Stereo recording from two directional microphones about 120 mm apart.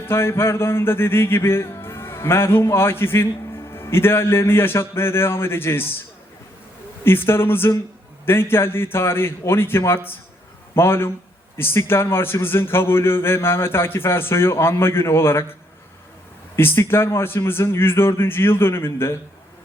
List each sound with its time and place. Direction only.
0.0 s music: 20° left (ahead or behind)
7.0 s music: 20° left (ahead or behind)
16.6 s music: 20° left (ahead or behind)